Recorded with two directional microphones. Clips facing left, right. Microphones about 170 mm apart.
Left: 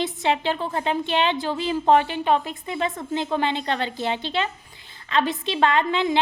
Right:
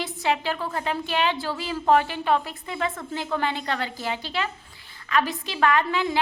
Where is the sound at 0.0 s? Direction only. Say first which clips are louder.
Left 3 dB; 25° left (ahead or behind).